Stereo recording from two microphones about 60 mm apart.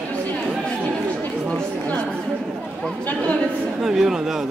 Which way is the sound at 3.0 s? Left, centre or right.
Left.